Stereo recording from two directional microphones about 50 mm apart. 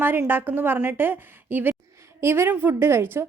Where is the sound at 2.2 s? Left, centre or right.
Right.